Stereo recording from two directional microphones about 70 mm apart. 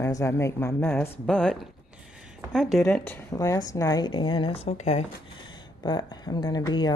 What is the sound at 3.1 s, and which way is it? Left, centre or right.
Speech, left.